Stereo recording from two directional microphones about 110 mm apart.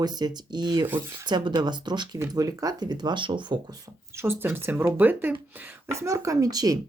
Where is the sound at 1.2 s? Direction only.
40° right (ahead or behind).